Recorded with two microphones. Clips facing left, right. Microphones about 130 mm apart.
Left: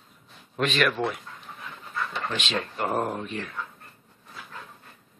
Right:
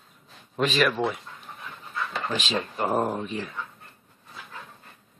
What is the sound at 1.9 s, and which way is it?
Dog, centre (ahead or behind).